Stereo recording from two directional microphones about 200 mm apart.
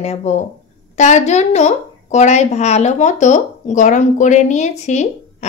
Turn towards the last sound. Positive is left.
turn(degrees=35)  # may be behind; listen again after turning